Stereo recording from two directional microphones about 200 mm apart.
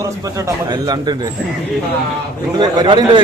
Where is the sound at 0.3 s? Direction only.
20° right (ahead or behind).